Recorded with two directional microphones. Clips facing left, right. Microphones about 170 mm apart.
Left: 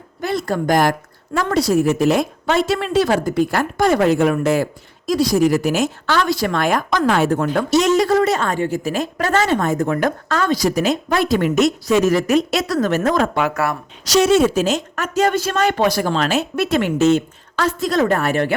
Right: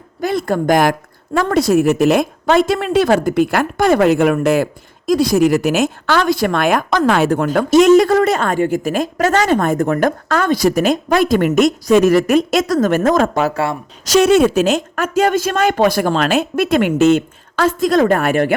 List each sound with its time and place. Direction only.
0.2 s a woman's voice: 50° right (ahead or behind); by 2.2 s 70° right (ahead or behind)
2.5 s a woman's voice: 45° right (ahead or behind)
5.4 s a woman's voice: 70° right (ahead or behind)
7.7 s a woman's voice: 55° right (ahead or behind); by 13.7 s 30° right (ahead or behind)
14.0 s a woman's voice: 55° right (ahead or behind)